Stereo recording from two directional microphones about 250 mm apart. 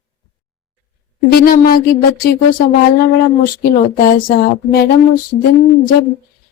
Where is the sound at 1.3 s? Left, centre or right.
Left.